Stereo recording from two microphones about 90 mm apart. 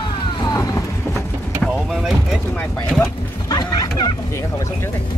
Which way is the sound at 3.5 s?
50° left (ahead or behind).